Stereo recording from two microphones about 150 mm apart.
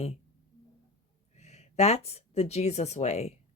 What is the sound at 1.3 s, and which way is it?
Speech, 45° left (ahead or behind).